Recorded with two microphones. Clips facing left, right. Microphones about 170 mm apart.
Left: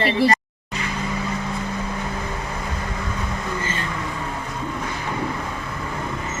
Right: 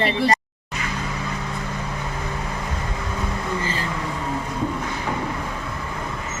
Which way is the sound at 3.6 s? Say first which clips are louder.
Right 1 dB; 30° right (ahead or behind).